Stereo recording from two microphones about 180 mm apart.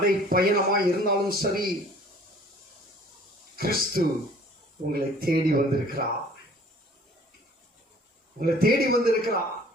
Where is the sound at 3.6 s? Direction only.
55° right (ahead or behind).